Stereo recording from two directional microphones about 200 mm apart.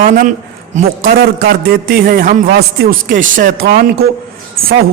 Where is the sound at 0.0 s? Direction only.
45° right (ahead or behind).